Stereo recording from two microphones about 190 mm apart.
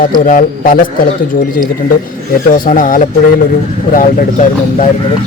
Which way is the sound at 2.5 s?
45° left (ahead or behind).